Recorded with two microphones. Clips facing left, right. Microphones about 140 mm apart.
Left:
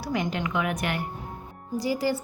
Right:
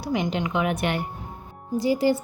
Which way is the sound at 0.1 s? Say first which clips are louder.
Right 3 dB; 20° right (ahead or behind).